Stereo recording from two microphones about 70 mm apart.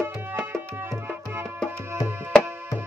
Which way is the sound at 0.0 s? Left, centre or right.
Right.